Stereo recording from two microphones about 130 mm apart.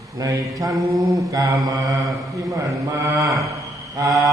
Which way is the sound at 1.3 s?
30° right (ahead or behind).